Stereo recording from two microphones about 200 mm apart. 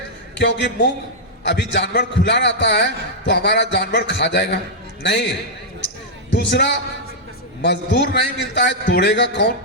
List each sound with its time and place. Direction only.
0.3 s a man's voice: 60° left (ahead or behind)
6.3 s a man's voice: 60° left (ahead or behind)